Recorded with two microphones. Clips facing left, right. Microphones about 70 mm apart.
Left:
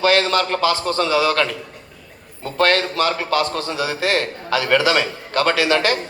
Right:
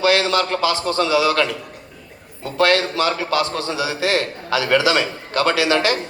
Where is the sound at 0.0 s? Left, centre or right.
Left.